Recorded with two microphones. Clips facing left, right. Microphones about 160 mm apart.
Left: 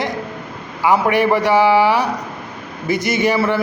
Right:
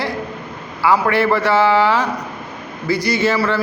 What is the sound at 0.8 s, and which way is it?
A man's voice, 15° left (ahead or behind).